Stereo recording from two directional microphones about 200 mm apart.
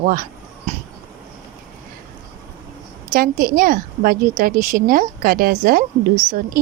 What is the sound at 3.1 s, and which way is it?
Speech, 45° right (ahead or behind).